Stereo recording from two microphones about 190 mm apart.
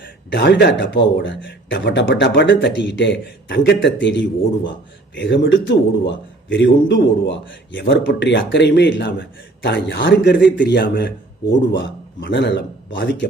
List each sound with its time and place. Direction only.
0.3 s a man's voice: 65° left (ahead or behind)